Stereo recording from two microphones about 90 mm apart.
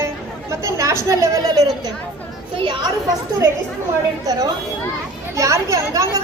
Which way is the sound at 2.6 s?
65° right (ahead or behind).